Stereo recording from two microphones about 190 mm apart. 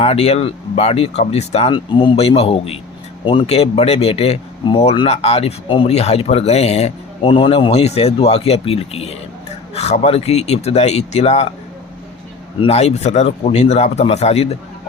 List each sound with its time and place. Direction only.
0.0 s speech: 35° left (ahead or behind)
12.6 s speech: 35° left (ahead or behind)